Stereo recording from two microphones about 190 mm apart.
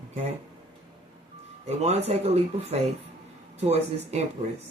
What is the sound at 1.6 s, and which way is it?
Speech, 35° right (ahead or behind).